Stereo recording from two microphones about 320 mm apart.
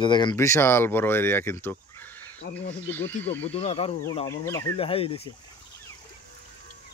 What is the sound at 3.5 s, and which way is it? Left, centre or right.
Speech, centre.